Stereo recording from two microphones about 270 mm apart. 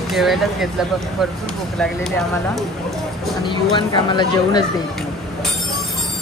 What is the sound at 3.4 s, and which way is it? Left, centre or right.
Speech, centre.